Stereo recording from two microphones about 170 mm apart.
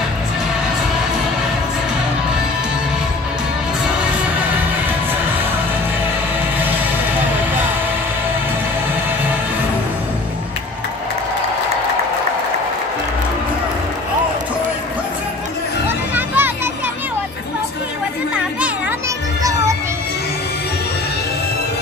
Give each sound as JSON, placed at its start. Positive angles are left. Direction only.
{"t": 16.2, "sound": "music", "side_deg": -10}
{"t": 18.3, "sound": "children playing", "side_deg": -10}
{"t": 19.4, "sound": "music", "side_deg": -20}